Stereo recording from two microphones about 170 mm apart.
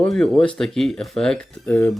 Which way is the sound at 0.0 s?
5° left (ahead or behind).